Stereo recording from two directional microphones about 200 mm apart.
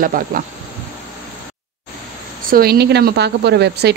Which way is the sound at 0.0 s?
45° right (ahead or behind).